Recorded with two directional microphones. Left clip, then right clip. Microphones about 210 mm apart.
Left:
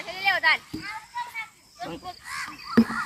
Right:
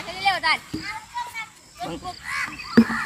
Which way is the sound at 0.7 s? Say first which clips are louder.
Right 3 dB; 15° right (ahead or behind).